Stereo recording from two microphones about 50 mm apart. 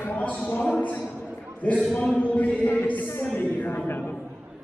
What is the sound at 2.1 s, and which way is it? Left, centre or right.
Speech, left.